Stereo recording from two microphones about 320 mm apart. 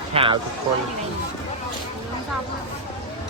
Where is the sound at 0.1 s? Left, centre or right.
Centre.